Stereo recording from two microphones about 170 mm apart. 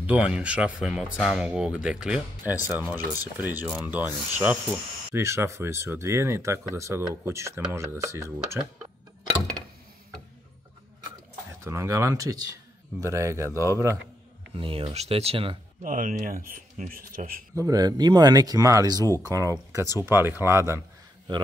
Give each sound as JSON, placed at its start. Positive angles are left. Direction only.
{"t": 0.0, "sound": "speech", "side_deg": -5}
{"t": 11.6, "sound": "speech", "side_deg": -15}
{"t": 14.5, "sound": "speech", "side_deg": -35}
{"t": 15.8, "sound": "speech", "side_deg": -55}
{"t": 17.6, "sound": "speech", "side_deg": -20}